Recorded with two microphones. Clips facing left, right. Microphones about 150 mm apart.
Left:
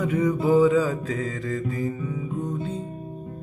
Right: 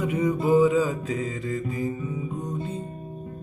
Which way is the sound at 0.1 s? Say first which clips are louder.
Left 1 dB; 20° right (ahead or behind).